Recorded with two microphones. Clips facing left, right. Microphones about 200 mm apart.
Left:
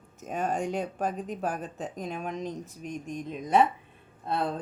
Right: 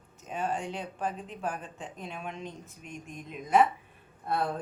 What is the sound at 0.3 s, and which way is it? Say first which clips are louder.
Speech: left 4 dB; 45° left (ahead or behind).